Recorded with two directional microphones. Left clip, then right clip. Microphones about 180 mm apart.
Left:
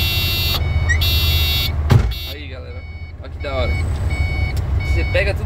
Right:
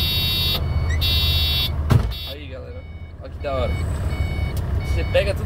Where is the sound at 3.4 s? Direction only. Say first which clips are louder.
Left 1 dB; 15° left (ahead or behind).